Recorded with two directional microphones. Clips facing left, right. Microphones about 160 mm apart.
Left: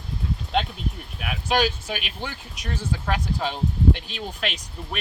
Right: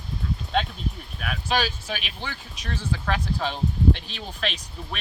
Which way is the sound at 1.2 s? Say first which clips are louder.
Left 3 dB; 10° left (ahead or behind).